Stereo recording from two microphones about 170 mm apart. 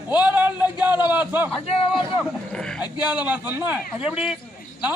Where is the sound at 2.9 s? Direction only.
25° left (ahead or behind).